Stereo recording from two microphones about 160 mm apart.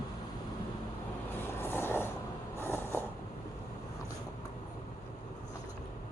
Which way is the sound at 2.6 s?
15° left (ahead or behind).